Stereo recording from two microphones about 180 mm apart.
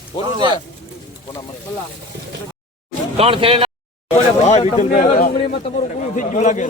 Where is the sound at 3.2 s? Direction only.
30° right (ahead or behind).